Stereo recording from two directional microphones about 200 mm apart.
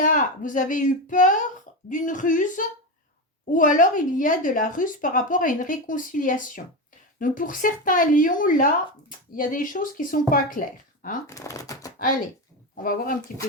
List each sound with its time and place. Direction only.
0.0 s speech: 40° left (ahead or behind)
11.3 s speech: 15° left (ahead or behind)
11.9 s speech: 45° left (ahead or behind)